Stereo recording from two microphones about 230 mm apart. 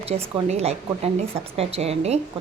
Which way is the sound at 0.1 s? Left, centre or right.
Right.